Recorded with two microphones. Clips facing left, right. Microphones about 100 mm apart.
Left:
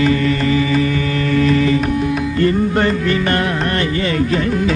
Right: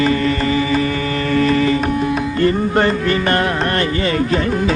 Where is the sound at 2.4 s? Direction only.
35° right (ahead or behind).